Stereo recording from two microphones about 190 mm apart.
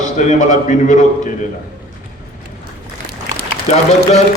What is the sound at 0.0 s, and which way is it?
A man's voice, 40° left (ahead or behind).